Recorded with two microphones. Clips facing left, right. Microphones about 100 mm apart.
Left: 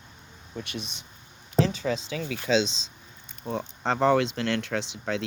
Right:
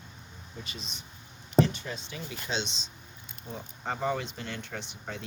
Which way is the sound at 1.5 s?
90° left.